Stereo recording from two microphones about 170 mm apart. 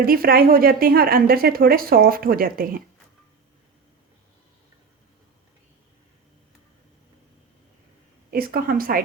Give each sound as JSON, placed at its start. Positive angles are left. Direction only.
{"t": 0.0, "sound": "a woman's voice", "side_deg": -60}
{"t": 8.3, "sound": "a woman's voice", "side_deg": -60}